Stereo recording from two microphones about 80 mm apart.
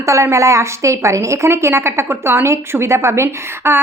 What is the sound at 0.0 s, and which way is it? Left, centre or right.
A woman's voice, right.